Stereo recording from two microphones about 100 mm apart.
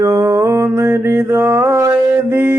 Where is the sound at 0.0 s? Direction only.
35° right (ahead or behind).